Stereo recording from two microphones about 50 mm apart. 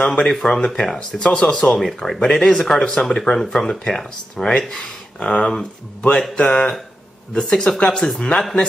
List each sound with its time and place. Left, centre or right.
0.0 s speech: centre
0.9 s speech: centre
5.2 s speech: left